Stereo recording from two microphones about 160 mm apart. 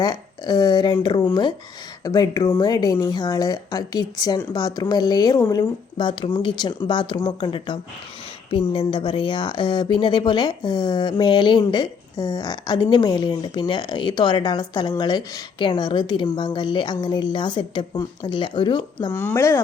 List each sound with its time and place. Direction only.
0.0 s a woman's voice: 25° left (ahead or behind)
19.1 s speech: 15° left (ahead or behind)